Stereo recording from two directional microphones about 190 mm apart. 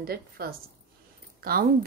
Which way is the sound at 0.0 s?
55° right (ahead or behind).